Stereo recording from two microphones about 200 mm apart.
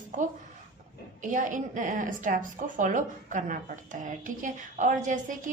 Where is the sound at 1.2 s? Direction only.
40° right (ahead or behind).